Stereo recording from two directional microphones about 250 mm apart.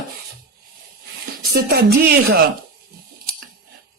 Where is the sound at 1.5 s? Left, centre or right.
Right.